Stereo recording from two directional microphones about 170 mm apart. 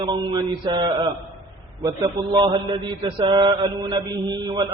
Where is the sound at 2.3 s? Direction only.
25° right (ahead or behind).